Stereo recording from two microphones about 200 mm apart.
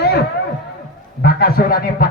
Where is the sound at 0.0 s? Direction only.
55° left (ahead or behind).